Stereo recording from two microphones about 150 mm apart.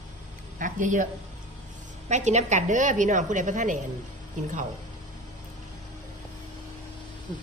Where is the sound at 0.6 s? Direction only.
60° right (ahead or behind).